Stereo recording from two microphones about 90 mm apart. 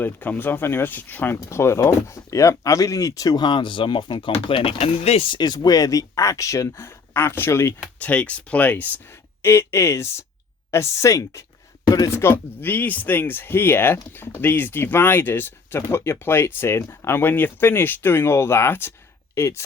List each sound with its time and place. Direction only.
0.0 s speech: 20° left (ahead or behind); by 3.4 s 45° left (ahead or behind)
3.4 s speech: 60° left (ahead or behind); by 5.4 s 90° left
5.4 s speech: 50° left (ahead or behind); by 7.7 s 25° left (ahead or behind)
7.9 s speech: 15° left (ahead or behind)
9.4 s speech: 30° left (ahead or behind)
12.1 s speech: 25° left (ahead or behind)